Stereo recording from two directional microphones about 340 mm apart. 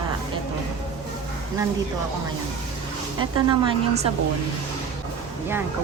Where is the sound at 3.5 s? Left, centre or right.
Centre.